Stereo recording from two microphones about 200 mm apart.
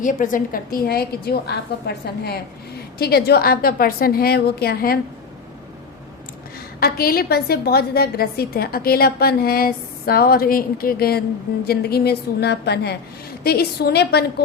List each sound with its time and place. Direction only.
0.0 s a woman's voice: 40° left (ahead or behind)
3.0 s a woman's voice: 50° left (ahead or behind)
6.7 s a woman's voice: 50° left (ahead or behind)